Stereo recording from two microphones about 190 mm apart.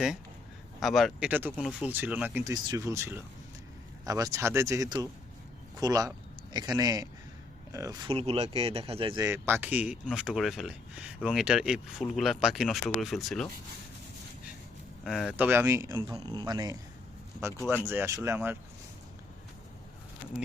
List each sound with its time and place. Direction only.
0.8 s speech: centre (ahead or behind); by 8.1 s 15° right (ahead or behind)
8.1 s speech: 30° right (ahead or behind)
9.2 s speech: 10° right (ahead or behind)
15.0 s speech: centre (ahead or behind)